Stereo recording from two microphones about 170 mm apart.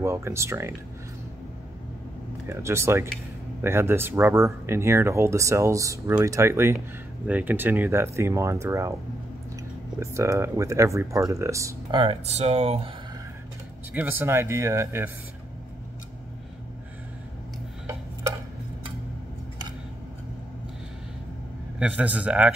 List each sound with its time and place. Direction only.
0.0 s speech: 15° right (ahead or behind)
2.4 s speech: 15° right (ahead or behind)
9.9 s speech: 15° right (ahead or behind)
12.0 s speech: 35° right (ahead or behind)
13.9 s speech: 10° right (ahead or behind)
21.7 s speech: 5° right (ahead or behind)